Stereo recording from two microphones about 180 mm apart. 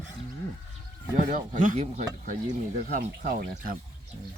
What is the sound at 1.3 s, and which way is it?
Speech, 45° right (ahead or behind).